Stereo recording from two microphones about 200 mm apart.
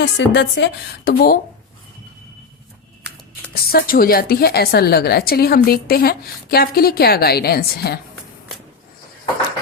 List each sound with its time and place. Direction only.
0.0 s a woman's voice: 60° left (ahead or behind)
3.5 s a woman's voice: 50° left (ahead or behind)